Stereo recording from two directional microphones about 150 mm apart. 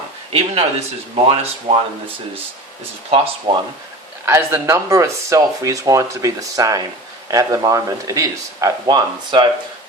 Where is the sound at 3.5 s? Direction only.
35° right (ahead or behind).